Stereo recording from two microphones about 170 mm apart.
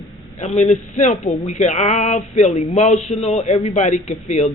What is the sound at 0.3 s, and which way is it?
Speech, 40° left (ahead or behind).